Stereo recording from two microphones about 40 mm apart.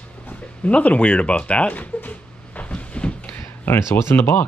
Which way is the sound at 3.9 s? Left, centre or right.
Left.